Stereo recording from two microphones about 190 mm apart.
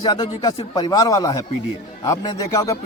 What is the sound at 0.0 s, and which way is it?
Speech, 20° left (ahead or behind).